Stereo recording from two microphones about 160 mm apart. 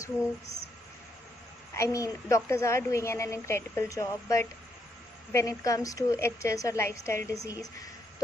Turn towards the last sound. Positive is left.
turn(degrees=15)  # may be behind; listen again after turning